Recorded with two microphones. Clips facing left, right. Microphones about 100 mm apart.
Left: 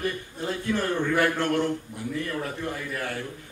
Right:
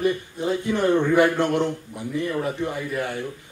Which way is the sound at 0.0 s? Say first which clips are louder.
Right 7 dB; 20° right (ahead or behind).